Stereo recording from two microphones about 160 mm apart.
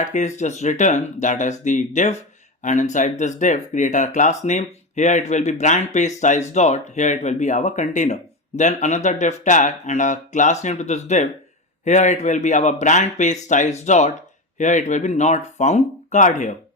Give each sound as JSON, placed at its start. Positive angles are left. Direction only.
{"t": 0.0, "sound": "speech", "side_deg": 50}